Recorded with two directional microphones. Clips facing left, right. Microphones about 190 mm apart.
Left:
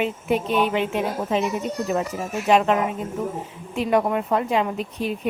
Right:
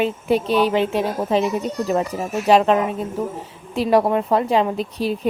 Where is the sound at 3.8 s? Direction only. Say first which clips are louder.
Right 4 dB; 35° right (ahead or behind).